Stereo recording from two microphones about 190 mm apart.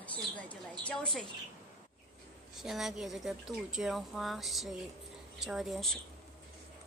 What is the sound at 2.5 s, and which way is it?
Speech, centre (ahead or behind).